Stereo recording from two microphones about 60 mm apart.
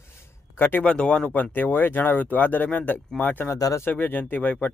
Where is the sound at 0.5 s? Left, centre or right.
Left.